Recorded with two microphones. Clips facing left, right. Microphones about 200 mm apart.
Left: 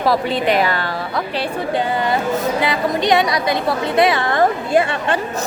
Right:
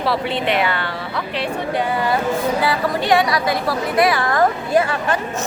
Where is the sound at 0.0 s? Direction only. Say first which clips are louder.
Left 3 dB; 40° left (ahead or behind).